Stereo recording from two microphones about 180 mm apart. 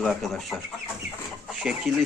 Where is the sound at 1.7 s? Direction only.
5° right (ahead or behind).